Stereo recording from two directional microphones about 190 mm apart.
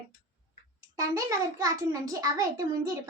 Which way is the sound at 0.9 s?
20° right (ahead or behind).